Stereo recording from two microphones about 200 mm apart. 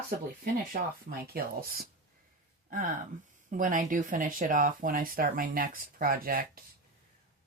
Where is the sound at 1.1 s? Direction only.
50° right (ahead or behind).